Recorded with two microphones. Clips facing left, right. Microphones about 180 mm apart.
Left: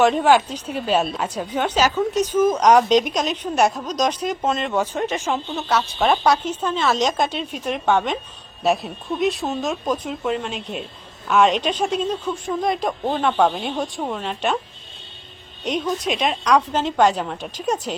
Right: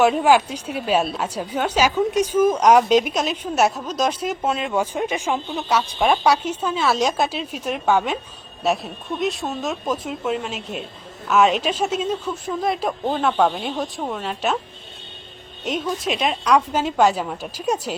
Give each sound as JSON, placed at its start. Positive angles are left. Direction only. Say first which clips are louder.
{"t": 0.0, "sound": "a woman's voice", "louder": "even", "side_deg": -10}
{"t": 15.6, "sound": "a woman's voice", "louder": "left 1 dB", "side_deg": -5}